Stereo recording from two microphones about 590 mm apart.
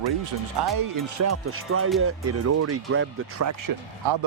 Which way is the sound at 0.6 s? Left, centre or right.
Right.